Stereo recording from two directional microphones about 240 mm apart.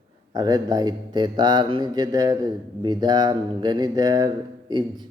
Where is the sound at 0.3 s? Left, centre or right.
Centre.